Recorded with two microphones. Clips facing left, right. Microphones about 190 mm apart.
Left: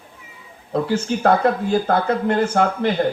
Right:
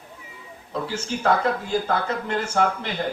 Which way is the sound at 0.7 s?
60° left (ahead or behind).